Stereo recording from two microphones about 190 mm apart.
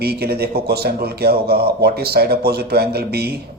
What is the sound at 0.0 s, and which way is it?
A man's voice, 55° right (ahead or behind).